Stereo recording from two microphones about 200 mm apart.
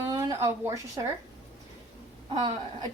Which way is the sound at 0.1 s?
15° right (ahead or behind).